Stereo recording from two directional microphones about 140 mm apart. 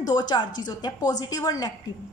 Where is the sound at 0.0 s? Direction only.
30° left (ahead or behind).